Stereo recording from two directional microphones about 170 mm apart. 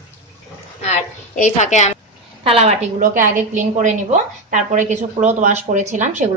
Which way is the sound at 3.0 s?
50° right (ahead or behind).